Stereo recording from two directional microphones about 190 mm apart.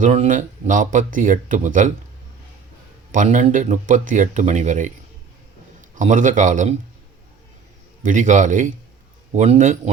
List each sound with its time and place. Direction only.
0.0 s speech: 40° right (ahead or behind)
3.1 s speech: 40° right (ahead or behind)
5.9 s speech: 40° right (ahead or behind)
8.0 s speech: 40° right (ahead or behind)